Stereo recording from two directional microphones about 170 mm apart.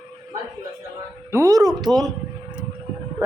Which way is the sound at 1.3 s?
20° right (ahead or behind).